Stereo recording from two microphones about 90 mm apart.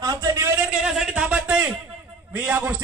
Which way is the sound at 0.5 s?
10° right (ahead or behind).